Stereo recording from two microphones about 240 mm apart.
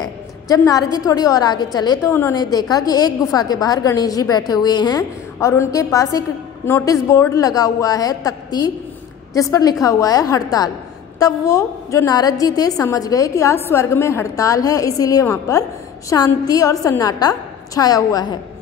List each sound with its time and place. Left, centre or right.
0.0 s a woman's voice: centre